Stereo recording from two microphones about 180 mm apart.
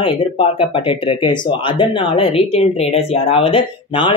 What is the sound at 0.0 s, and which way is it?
Speech, 30° left (ahead or behind).